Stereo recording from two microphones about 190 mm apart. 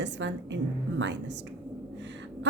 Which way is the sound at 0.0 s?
70° right (ahead or behind).